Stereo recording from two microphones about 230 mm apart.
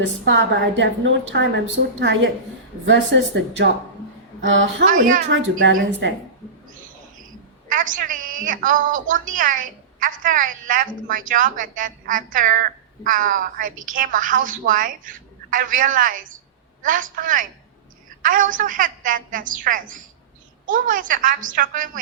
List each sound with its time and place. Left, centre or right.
0.0 s a woman's voice: right
4.9 s a woman's voice: right
5.3 s a woman's voice: right
7.7 s a woman's voice: right